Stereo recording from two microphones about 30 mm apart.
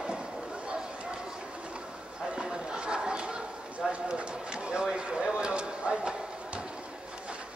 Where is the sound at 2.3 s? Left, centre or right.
Right.